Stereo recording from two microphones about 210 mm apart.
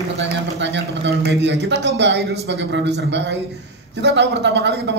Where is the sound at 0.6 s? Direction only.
55° right (ahead or behind).